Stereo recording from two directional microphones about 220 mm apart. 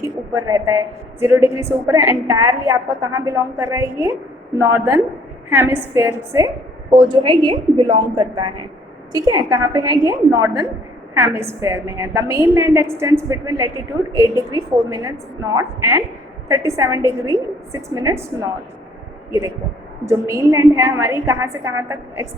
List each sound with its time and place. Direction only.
0.3 s a woman's voice: 15° right (ahead or behind)
20.1 s a woman's voice: 15° right (ahead or behind)